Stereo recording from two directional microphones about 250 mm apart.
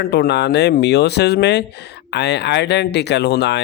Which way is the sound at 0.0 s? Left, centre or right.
Left.